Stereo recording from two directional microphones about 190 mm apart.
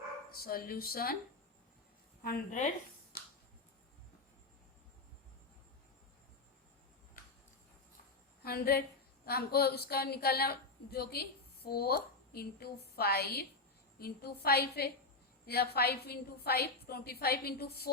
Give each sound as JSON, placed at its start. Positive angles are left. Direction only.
{"t": 0.4, "sound": "speech", "side_deg": 50}
{"t": 2.2, "sound": "speech", "side_deg": 40}
{"t": 8.4, "sound": "a woman's voice", "side_deg": 55}